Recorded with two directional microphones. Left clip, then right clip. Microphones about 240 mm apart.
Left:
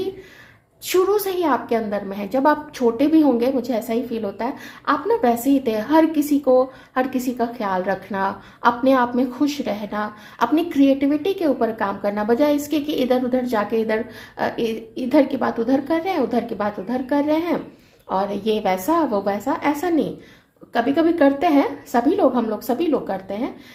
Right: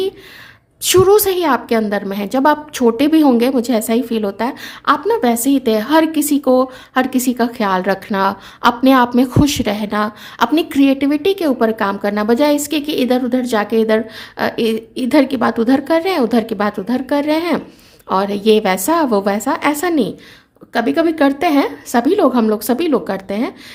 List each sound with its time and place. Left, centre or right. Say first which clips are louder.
0.8 s a woman's voice: right 8 dB; right